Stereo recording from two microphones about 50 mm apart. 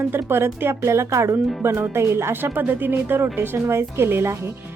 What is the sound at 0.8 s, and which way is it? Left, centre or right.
Speech, right.